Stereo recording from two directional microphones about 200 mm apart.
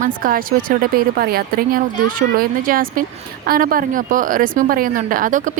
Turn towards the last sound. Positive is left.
turn(degrees=-40)  # may be behind; listen again after turning